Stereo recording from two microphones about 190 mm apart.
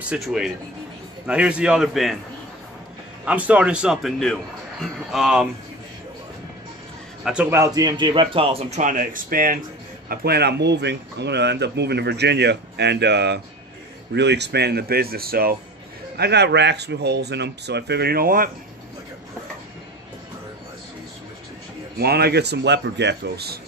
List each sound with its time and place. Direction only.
0.0 s a man's voice: 5° right (ahead or behind)
3.3 s a man's voice: 5° right (ahead or behind)
7.2 s a man's voice: 5° right (ahead or behind)
7.6 s speech: 20° right (ahead or behind); by 18.5 s 50° right (ahead or behind)
21.9 s speech: 55° right (ahead or behind)